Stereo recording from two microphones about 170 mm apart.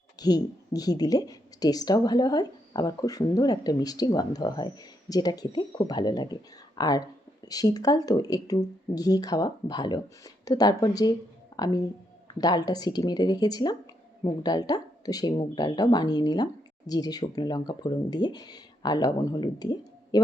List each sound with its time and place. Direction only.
0.2 s speech: 25° left (ahead or behind)